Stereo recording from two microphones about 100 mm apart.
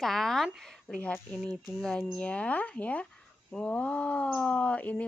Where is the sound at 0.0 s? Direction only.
5° left (ahead or behind).